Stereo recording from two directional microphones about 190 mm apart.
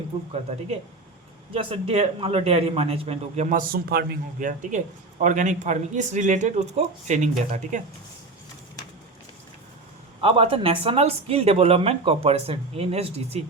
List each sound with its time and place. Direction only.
1.5 s speech: 30° right (ahead or behind)
10.2 s speech: 30° right (ahead or behind)